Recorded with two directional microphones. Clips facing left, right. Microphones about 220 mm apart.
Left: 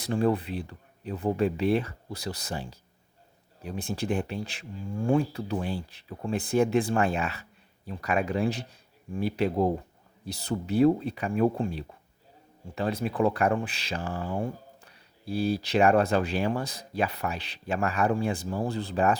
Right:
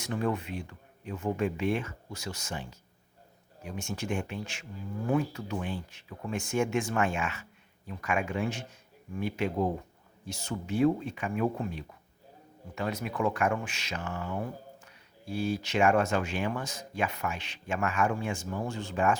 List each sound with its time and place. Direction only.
0.0 s speech: 35° left (ahead or behind)